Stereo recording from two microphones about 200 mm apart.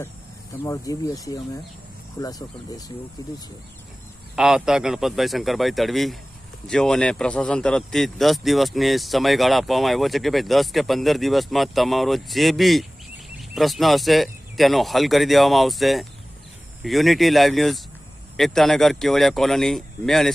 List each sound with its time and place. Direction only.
0.6 s speech: 15° left (ahead or behind)
4.4 s a man's voice: 5° right (ahead or behind)